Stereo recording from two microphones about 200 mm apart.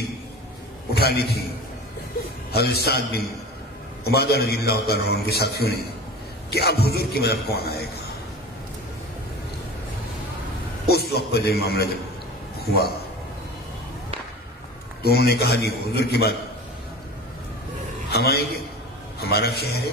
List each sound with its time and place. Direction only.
0.9 s a man's voice: 50° left (ahead or behind)
2.5 s a man's voice: 50° left (ahead or behind)
10.9 s a man's voice: 55° left (ahead or behind)
15.0 s a man's voice: 55° left (ahead or behind)
18.1 s a man's voice: 50° left (ahead or behind)